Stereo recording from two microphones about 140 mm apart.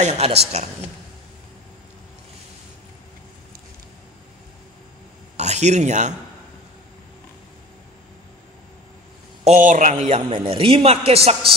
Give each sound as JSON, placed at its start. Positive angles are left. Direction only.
{"t": 0.0, "sound": "a woman's voice", "side_deg": -50}
{"t": 5.4, "sound": "speech", "side_deg": -55}
{"t": 9.4, "sound": "a man's voice", "side_deg": -55}
{"t": 10.3, "sound": "a man's voice", "side_deg": -40}